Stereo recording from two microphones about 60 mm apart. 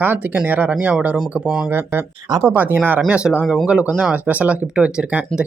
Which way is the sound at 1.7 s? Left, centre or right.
Right.